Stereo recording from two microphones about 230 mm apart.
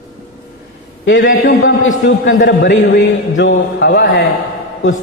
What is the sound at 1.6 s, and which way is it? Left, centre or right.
A man's voice, left.